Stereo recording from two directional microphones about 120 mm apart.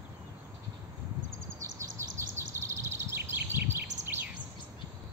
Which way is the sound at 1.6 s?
25° right (ahead or behind).